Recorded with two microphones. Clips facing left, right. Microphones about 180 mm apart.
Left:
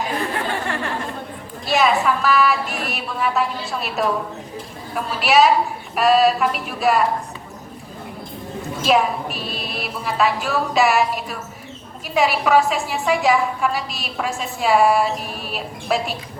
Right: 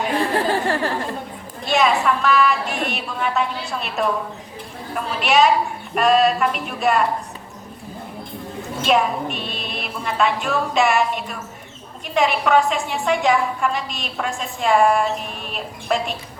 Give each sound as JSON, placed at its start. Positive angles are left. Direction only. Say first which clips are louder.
{"t": 0.2, "sound": "chatter", "louder": "right 4 dB", "side_deg": -35}
{"t": 1.6, "sound": "a woman's voice", "louder": "even", "side_deg": 0}
{"t": 8.8, "sound": "a woman's voice", "louder": "even", "side_deg": 0}